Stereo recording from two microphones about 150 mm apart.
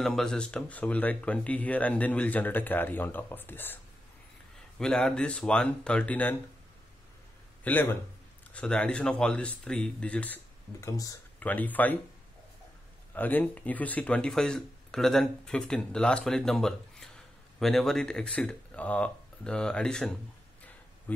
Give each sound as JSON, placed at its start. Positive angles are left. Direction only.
{"t": 0.0, "sound": "speech", "side_deg": 5}
{"t": 7.6, "sound": "speech", "side_deg": 15}
{"t": 11.3, "sound": "speech", "side_deg": 10}
{"t": 13.1, "sound": "speech", "side_deg": 10}